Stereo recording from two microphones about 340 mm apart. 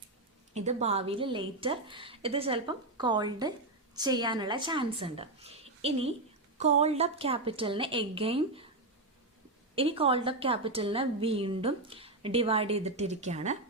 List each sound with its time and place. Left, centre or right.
0.5 s a woman's voice: centre
9.7 s a woman's voice: centre